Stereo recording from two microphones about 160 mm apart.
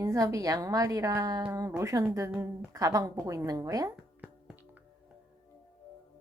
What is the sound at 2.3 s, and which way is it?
Speech, 5° right (ahead or behind).